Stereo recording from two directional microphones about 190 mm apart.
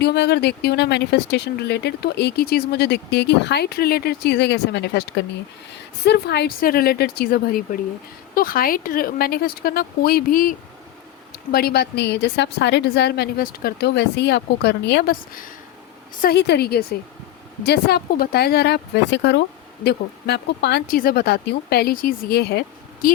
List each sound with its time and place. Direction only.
0.0 s a woman's voice: 60° left (ahead or behind)